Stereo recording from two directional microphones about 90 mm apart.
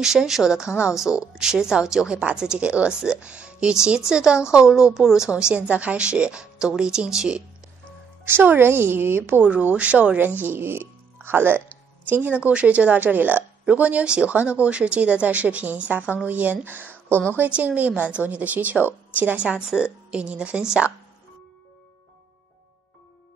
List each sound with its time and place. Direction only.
0.0 s speech: 5° right (ahead or behind)
8.3 s a woman's voice: 25° right (ahead or behind)